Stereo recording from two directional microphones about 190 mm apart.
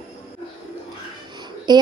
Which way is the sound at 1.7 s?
25° right (ahead or behind).